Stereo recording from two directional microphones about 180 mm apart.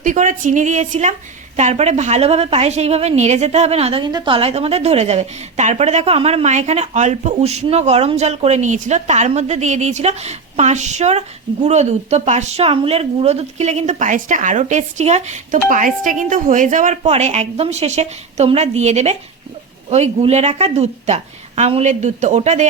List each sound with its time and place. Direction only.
0.0 s a woman's voice: 45° right (ahead or behind)